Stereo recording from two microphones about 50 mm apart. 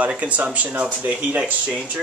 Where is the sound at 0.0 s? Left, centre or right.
Right.